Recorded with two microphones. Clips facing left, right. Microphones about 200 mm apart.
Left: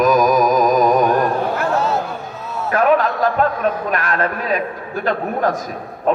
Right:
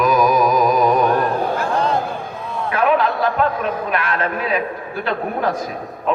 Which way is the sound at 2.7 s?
45° left (ahead or behind).